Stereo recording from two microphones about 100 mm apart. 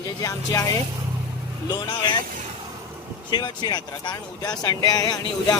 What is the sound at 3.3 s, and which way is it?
Speech, 45° left (ahead or behind).